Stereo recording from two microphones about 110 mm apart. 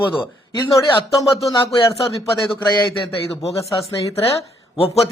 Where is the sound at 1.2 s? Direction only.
30° left (ahead or behind).